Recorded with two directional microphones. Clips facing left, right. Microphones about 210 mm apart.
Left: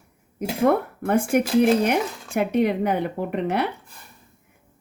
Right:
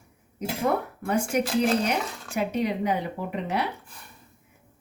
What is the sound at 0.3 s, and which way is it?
Speech, 55° left (ahead or behind).